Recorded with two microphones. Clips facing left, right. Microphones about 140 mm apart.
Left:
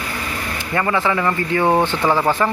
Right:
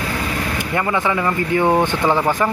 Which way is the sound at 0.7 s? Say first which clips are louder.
Left 1 dB; 15° right (ahead or behind).